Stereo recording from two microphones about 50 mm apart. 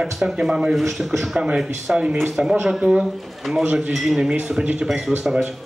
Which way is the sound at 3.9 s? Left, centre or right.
Centre.